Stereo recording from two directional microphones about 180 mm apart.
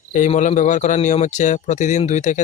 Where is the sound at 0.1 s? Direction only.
45° left (ahead or behind).